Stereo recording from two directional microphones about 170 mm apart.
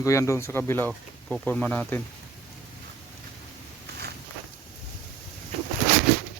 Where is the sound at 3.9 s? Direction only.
75° right (ahead or behind).